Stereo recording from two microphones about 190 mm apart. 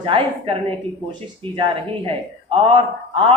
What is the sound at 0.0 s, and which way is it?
A man's voice, 30° right (ahead or behind).